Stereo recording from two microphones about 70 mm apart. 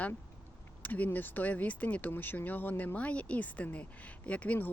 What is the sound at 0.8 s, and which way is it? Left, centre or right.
Speech, left.